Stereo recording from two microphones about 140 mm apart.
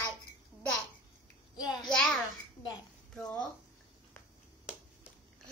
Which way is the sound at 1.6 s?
30° left (ahead or behind).